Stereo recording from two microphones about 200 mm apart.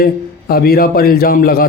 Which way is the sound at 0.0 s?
50° left (ahead or behind).